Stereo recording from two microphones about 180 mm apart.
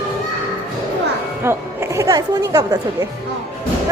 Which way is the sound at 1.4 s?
15° right (ahead or behind).